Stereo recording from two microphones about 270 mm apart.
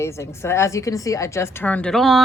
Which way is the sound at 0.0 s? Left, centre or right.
Centre.